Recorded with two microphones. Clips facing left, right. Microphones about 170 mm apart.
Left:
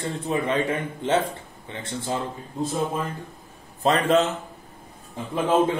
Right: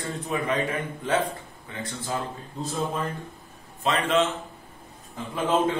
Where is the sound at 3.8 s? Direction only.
35° left (ahead or behind).